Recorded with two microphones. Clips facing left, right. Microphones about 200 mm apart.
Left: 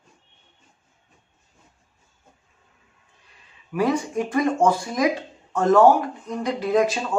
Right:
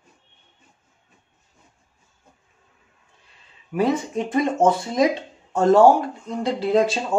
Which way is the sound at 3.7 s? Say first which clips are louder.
Right 1 dB; 25° right (ahead or behind).